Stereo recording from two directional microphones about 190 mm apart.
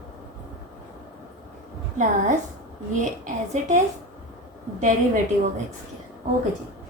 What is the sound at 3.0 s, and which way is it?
A woman's voice, 40° right (ahead or behind).